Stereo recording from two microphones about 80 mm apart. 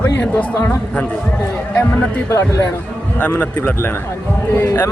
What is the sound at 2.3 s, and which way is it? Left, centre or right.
Speech, left.